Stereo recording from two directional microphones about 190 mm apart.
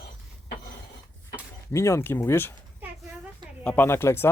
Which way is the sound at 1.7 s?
15° left (ahead or behind).